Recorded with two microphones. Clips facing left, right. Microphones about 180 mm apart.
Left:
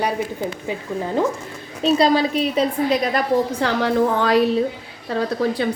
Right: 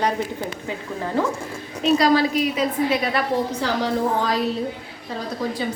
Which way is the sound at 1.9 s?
25° left (ahead or behind).